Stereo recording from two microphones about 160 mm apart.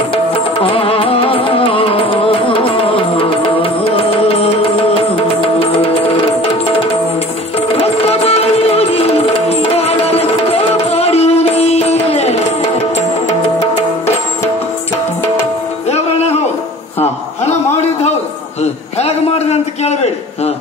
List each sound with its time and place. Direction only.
0.1 s music: 35° left (ahead or behind)
7.7 s music: 40° left (ahead or behind)
15.9 s music: 40° left (ahead or behind)
18.6 s a sound: 40° left (ahead or behind)